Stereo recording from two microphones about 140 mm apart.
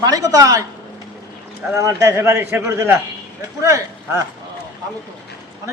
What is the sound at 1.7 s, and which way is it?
Speech, 20° right (ahead or behind).